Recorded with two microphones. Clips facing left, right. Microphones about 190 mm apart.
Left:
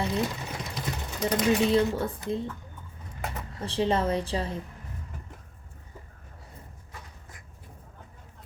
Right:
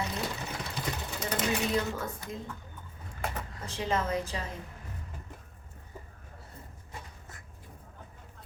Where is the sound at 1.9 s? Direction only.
30° left (ahead or behind).